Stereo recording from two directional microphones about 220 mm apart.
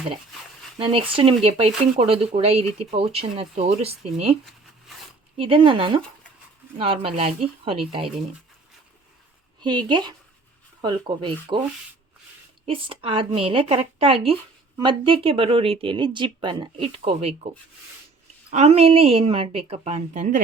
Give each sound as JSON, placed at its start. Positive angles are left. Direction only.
{"t": 0.8, "sound": "speech", "side_deg": -25}
{"t": 5.4, "sound": "speech", "side_deg": -25}
{"t": 9.6, "sound": "speech", "side_deg": -20}
{"t": 12.6, "sound": "speech", "side_deg": -25}
{"t": 18.5, "sound": "speech", "side_deg": -30}